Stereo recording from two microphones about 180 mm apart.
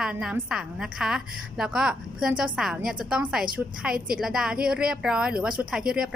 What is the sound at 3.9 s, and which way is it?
Speech, 55° right (ahead or behind).